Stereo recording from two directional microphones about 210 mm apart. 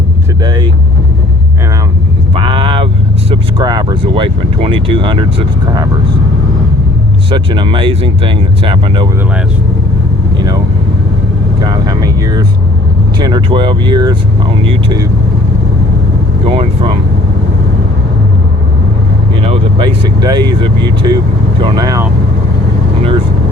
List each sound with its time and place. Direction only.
0.4 s speech: 20° right (ahead or behind)
2.3 s speech: 25° right (ahead or behind)
7.3 s speech: 25° right (ahead or behind)
11.6 s speech: 20° right (ahead or behind)
16.5 s speech: 25° right (ahead or behind)
19.4 s speech: 25° right (ahead or behind)